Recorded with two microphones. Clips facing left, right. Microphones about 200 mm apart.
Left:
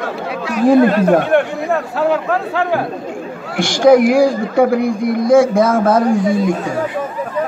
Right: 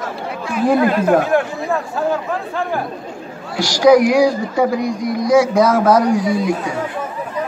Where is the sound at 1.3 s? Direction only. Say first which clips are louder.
Left 3 dB; 75° left (ahead or behind).